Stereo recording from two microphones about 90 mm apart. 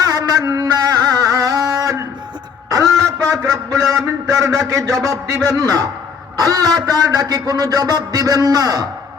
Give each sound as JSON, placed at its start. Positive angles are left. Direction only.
{"t": 0.0, "sound": "music", "side_deg": -45}
{"t": 2.6, "sound": "a sound", "side_deg": -40}
{"t": 4.0, "sound": "a man's voice", "side_deg": -40}